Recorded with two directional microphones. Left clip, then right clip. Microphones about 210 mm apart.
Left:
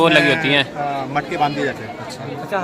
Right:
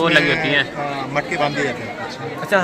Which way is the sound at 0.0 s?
30° left (ahead or behind).